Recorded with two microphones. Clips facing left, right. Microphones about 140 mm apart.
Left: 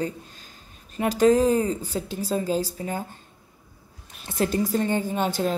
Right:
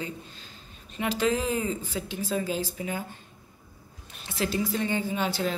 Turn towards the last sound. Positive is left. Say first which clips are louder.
# left 3 dB
turn(degrees=45)  # may be behind; listen again after turning